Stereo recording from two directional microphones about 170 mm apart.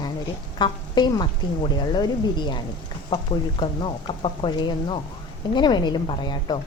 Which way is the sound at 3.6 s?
30° left (ahead or behind).